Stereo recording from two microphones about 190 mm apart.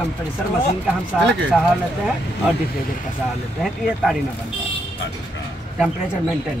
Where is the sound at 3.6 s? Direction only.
Centre (ahead or behind).